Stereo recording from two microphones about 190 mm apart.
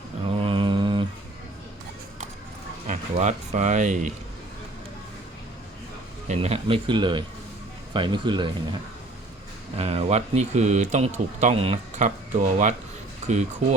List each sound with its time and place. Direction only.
0.3 s mantra: 25° right (ahead or behind)
2.8 s speech: 40° right (ahead or behind)
6.2 s a man's voice: 35° right (ahead or behind)
9.7 s speech: 30° right (ahead or behind)